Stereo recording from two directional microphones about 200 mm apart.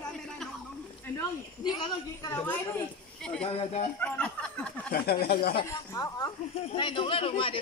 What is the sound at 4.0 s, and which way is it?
Speech, 5° left (ahead or behind).